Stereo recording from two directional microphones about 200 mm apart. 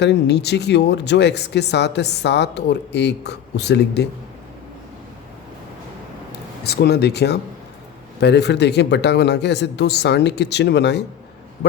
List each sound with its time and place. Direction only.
0.0 s speech: 60° left (ahead or behind)
6.7 s speech: 55° left (ahead or behind)